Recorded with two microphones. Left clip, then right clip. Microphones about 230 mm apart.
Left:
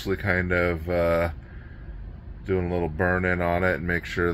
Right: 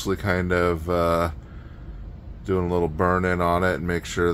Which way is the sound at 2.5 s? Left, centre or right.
Centre.